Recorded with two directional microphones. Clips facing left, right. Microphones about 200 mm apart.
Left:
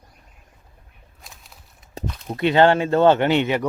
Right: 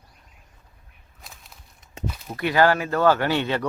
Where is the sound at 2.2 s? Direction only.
25° left (ahead or behind).